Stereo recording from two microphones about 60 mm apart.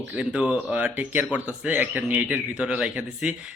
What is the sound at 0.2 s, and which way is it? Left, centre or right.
Speech, right.